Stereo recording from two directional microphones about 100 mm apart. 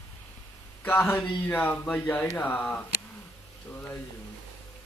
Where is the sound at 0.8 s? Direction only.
20° left (ahead or behind).